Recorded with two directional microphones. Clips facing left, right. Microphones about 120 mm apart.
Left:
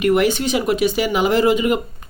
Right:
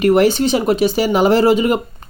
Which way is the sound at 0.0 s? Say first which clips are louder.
Right 4 dB; 35° right (ahead or behind).